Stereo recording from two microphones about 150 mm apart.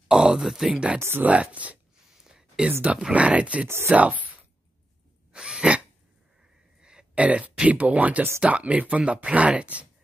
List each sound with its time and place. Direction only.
0.1 s speech: 5° right (ahead or behind)
2.2 s a sound: 5° right (ahead or behind)
2.7 s speech: 10° right (ahead or behind)
5.3 s sneeze: 5° right (ahead or behind)
6.8 s speech: 5° right (ahead or behind)